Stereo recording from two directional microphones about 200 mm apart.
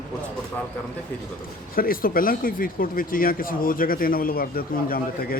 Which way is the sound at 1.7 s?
45° left (ahead or behind).